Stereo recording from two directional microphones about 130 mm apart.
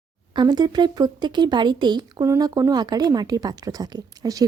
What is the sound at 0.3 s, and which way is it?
Speech, 35° right (ahead or behind).